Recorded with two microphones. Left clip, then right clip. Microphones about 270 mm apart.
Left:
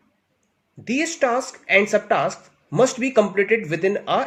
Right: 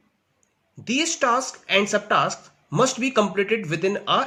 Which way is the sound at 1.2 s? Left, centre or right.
Centre.